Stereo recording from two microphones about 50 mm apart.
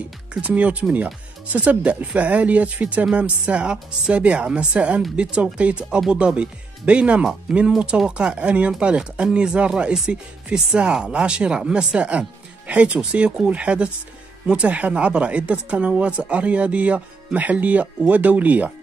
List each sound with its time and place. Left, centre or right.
0.4 s speech: right
7.5 s speech: centre
8.1 s speech: right